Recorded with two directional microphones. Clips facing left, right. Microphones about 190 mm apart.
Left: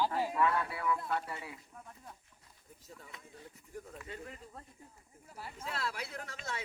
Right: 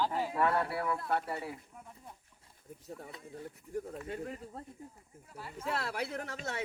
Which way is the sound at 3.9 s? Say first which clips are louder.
Right 7 dB; 40° right (ahead or behind).